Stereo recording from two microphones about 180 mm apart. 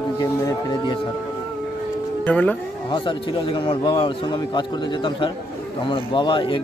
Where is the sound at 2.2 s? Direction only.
10° left (ahead or behind).